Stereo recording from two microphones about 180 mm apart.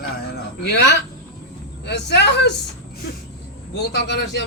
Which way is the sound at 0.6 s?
75° left (ahead or behind).